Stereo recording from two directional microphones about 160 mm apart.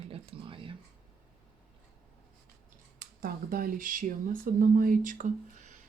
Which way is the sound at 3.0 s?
65° right (ahead or behind).